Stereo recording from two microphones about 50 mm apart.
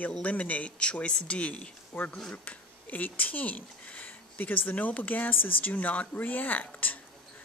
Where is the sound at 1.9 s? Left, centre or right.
Left.